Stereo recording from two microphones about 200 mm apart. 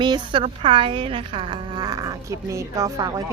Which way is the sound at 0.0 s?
25° right (ahead or behind).